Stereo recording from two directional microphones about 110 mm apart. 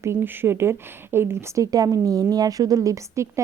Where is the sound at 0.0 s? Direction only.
20° right (ahead or behind).